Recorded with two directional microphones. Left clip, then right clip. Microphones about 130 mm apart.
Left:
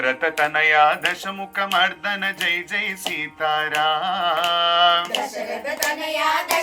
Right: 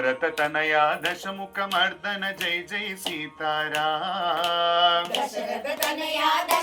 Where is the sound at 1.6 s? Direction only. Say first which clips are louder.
Left 5 dB; 30° left (ahead or behind).